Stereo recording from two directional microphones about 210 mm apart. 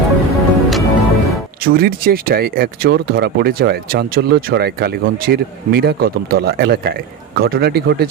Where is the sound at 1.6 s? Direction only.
45° right (ahead or behind).